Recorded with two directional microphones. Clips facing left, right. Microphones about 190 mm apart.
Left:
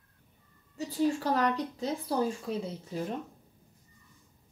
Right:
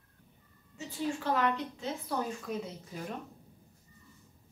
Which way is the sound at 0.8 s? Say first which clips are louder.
Left 7 dB; 35° left (ahead or behind).